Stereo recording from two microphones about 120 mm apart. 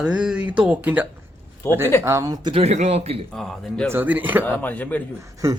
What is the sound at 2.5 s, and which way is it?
Speech, 65° right (ahead or behind).